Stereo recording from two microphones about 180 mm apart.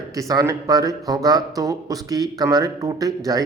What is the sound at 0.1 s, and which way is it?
Speech, 20° right (ahead or behind).